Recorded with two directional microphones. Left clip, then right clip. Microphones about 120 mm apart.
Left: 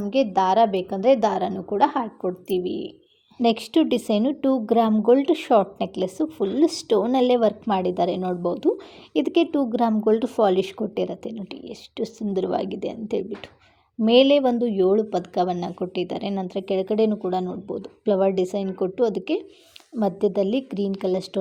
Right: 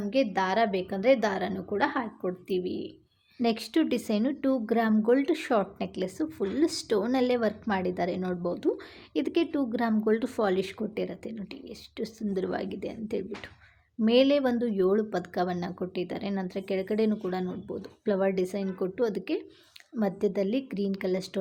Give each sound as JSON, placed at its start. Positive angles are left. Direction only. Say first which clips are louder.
{"t": 0.0, "sound": "a woman's voice", "louder": "left 6 dB", "side_deg": 20}